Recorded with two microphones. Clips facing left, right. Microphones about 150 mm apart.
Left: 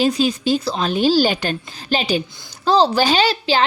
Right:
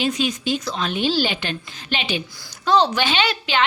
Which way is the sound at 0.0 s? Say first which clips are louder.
Left 5 dB; 35° left (ahead or behind).